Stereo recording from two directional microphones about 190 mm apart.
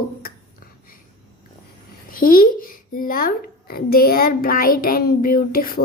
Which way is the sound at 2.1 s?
45° left (ahead or behind).